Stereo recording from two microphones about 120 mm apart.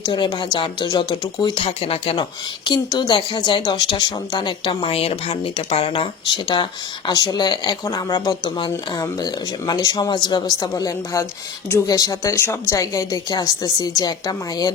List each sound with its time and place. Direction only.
0.0 s a woman's voice: 40° left (ahead or behind)
2.6 s a woman's voice: 35° left (ahead or behind)
8.4 s a woman's voice: 40° left (ahead or behind)